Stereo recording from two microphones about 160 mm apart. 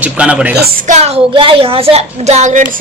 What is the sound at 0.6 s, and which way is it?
Speech, 60° right (ahead or behind).